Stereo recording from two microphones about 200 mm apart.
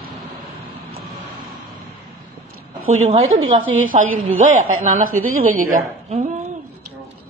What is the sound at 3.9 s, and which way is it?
A woman's voice, 30° right (ahead or behind).